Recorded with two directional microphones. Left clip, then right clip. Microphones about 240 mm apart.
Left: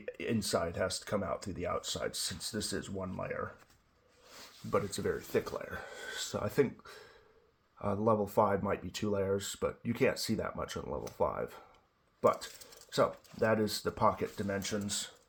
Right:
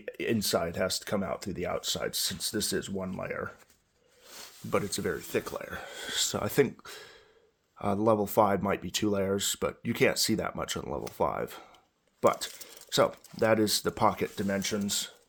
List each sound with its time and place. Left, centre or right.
0.0 s speech: right
4.7 s speech: right